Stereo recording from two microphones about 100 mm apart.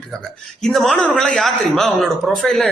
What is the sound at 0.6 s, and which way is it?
Speech, 5° left (ahead or behind).